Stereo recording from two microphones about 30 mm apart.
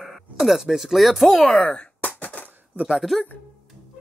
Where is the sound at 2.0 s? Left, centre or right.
Left.